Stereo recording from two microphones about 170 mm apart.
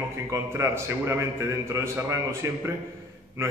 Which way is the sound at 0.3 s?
15° right (ahead or behind).